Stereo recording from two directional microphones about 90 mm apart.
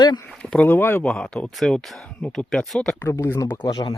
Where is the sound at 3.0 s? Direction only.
25° left (ahead or behind).